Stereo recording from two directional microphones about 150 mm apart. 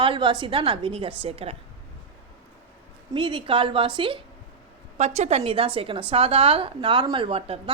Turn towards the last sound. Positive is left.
turn(degrees=-40)  # may be behind; listen again after turning